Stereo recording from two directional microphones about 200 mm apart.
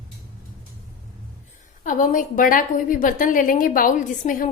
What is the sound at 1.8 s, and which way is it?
A woman's voice, 40° left (ahead or behind).